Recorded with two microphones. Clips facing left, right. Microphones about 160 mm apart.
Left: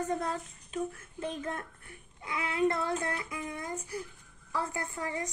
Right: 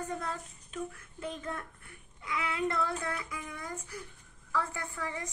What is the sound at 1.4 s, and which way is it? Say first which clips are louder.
Speech: left 2 dB; 40° left (ahead or behind).